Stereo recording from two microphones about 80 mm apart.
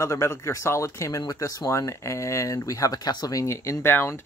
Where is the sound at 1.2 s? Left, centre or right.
Left.